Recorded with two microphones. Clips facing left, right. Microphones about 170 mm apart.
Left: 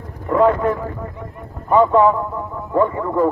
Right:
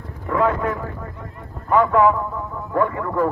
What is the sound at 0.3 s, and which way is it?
Speech, 35° left (ahead or behind).